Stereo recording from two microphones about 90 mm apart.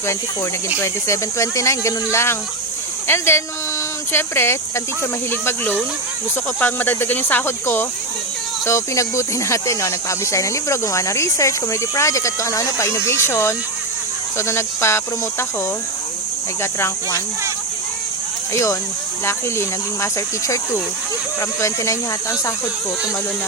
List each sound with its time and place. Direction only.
0.8 s speech: 30° left (ahead or behind)
18.5 s speech: 35° left (ahead or behind)